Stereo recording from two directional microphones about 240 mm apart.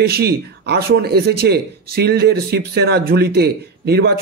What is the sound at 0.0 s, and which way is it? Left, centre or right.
Speech, right.